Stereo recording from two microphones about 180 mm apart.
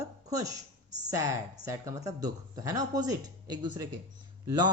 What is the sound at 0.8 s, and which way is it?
Speech, 40° right (ahead or behind).